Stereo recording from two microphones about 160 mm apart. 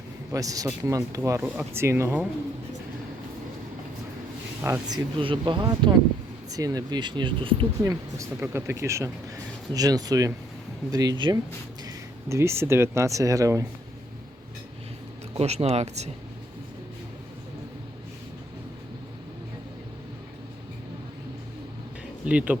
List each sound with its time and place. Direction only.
0.3 s speech: 20° right (ahead or behind)
4.6 s speech: 20° right (ahead or behind)
7.8 s speech: 20° right (ahead or behind)
15.4 s speech: 40° right (ahead or behind)
22.3 s speech: 10° right (ahead or behind)